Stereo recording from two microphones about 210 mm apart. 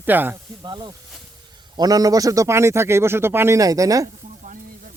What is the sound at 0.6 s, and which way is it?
Speech, 20° right (ahead or behind).